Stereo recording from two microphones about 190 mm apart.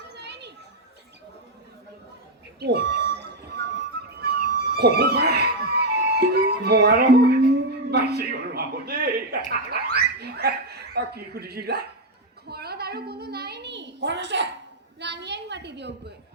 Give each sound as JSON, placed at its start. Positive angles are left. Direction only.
{"t": 0.3, "sound": "children playing", "side_deg": -65}
{"t": 2.6, "sound": "music", "side_deg": -65}
{"t": 7.9, "sound": "a man's voice", "side_deg": -60}
{"t": 9.5, "sound": "a sound", "side_deg": -55}